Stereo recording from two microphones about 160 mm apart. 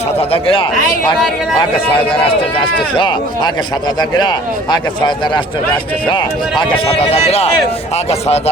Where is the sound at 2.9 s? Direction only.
30° left (ahead or behind).